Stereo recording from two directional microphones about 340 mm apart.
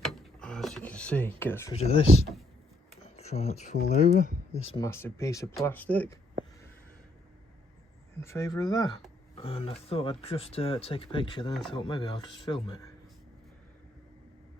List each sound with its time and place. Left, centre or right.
0.1 s power windows: centre
1.4 s speech: centre
1.7 s speech: centre
8.2 s speech: centre